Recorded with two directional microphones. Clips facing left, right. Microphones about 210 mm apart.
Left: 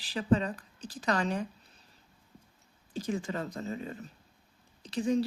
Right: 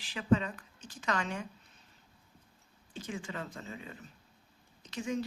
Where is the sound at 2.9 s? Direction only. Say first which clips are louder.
Left 7 dB; 40° left (ahead or behind).